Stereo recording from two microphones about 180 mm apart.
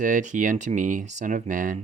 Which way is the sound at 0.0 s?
45° right (ahead or behind).